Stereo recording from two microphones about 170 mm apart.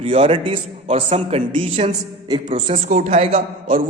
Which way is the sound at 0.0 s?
35° right (ahead or behind).